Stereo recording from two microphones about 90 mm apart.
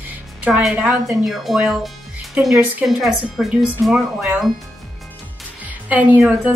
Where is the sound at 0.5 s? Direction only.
5° right (ahead or behind).